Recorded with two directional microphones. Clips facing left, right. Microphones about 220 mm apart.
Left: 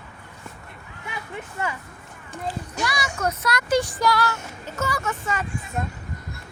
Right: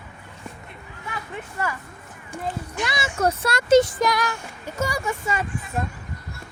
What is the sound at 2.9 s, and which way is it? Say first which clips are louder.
Speech: right 4 dB; 25° right (ahead or behind).